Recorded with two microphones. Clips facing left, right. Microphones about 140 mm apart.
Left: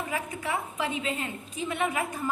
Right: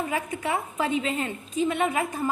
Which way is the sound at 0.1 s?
35° right (ahead or behind).